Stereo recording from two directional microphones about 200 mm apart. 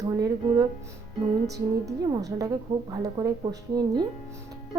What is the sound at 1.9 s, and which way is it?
A woman's voice, 15° right (ahead or behind).